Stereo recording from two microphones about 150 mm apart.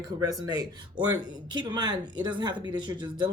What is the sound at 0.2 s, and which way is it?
Speech, 25° right (ahead or behind).